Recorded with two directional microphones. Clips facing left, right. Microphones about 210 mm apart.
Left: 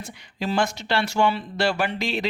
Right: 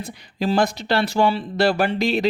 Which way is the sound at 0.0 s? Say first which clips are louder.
Right 5 dB; 35° right (ahead or behind).